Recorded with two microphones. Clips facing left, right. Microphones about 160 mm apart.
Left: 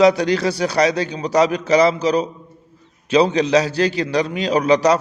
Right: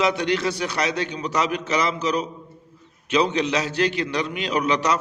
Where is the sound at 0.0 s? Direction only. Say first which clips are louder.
Left 7 dB; 35° left (ahead or behind).